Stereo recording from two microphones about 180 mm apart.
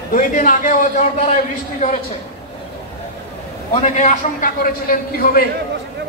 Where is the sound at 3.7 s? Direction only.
40° left (ahead or behind).